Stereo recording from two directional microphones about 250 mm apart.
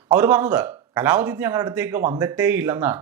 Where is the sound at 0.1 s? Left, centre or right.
Centre.